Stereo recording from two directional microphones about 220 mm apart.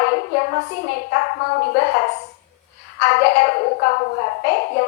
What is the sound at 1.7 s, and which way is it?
A woman's voice, 45° left (ahead or behind).